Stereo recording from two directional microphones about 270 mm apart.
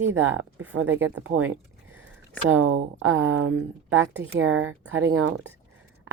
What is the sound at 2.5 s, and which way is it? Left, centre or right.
Speech, right.